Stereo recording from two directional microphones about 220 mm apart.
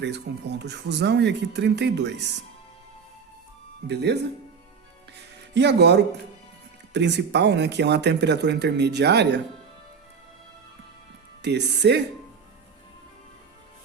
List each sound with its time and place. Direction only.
0.0 s speech: 50° right (ahead or behind)
3.8 s speech: 50° right (ahead or behind)
5.5 s speech: 50° right (ahead or behind)
11.4 s speech: 50° right (ahead or behind)